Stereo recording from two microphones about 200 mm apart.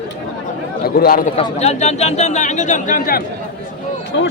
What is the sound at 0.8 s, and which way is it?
Speech, 50° left (ahead or behind).